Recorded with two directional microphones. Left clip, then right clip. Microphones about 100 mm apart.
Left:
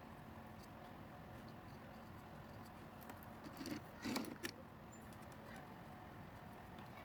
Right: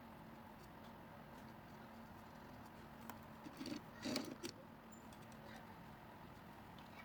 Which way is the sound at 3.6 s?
15° left (ahead or behind).